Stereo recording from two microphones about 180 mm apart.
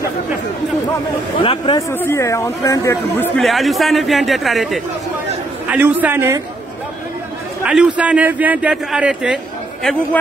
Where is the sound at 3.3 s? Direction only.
Centre (ahead or behind).